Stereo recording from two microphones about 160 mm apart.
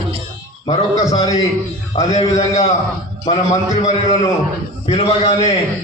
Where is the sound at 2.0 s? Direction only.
45° left (ahead or behind).